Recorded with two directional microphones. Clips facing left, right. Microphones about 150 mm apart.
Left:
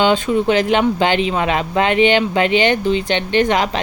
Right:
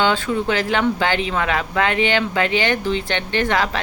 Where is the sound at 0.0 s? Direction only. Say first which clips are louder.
Left 4 dB; 20° left (ahead or behind).